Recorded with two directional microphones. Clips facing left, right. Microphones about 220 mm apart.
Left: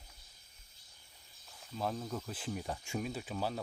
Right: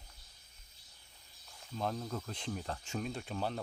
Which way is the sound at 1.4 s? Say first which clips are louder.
Even; centre (ahead or behind).